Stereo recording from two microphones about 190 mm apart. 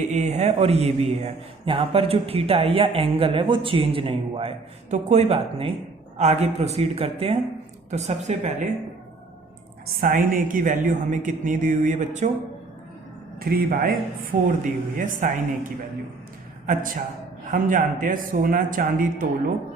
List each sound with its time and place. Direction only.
0.1 s a man's voice: 35° right (ahead or behind)
9.8 s a man's voice: 45° right (ahead or behind)
13.4 s a man's voice: 50° right (ahead or behind)